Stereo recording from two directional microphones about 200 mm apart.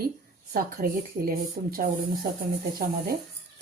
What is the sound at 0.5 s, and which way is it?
Speech, 50° right (ahead or behind).